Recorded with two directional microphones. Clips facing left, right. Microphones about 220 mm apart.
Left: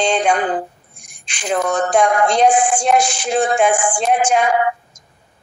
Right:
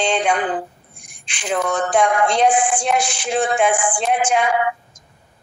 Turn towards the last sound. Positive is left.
turn(degrees=40)  # may be behind; listen again after turning